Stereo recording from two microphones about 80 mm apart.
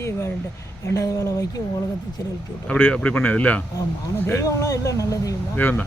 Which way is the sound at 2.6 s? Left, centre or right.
Centre.